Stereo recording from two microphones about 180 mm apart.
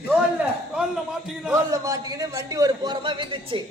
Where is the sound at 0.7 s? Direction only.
Centre (ahead or behind).